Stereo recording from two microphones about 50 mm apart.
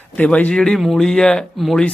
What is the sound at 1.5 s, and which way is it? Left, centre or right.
Speech, centre.